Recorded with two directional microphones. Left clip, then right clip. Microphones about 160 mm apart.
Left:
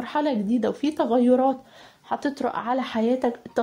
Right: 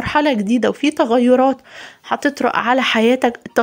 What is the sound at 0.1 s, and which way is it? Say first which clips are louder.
Speech: right 8 dB; 20° right (ahead or behind).